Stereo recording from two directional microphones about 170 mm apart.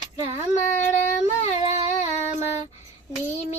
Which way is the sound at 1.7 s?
40° left (ahead or behind).